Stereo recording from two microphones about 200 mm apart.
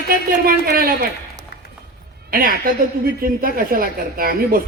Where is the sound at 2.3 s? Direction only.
45° right (ahead or behind).